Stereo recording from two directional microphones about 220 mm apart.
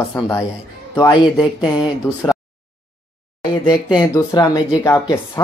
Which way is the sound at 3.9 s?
15° left (ahead or behind).